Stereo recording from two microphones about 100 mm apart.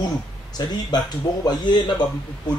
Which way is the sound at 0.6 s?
45° left (ahead or behind).